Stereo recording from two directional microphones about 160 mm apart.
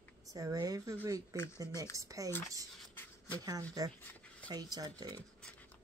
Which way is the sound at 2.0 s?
20° right (ahead or behind).